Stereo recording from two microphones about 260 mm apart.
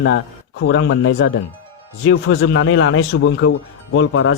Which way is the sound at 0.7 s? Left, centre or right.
Left.